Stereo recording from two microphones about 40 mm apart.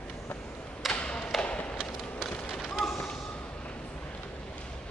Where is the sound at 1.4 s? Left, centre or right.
Left.